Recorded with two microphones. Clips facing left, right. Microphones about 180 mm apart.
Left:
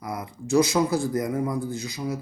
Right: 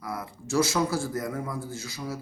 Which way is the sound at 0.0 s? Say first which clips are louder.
Left 3 dB; 20° left (ahead or behind).